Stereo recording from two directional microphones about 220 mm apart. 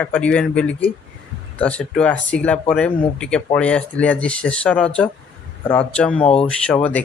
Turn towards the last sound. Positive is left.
turn(degrees=5)  # may be behind; listen again after turning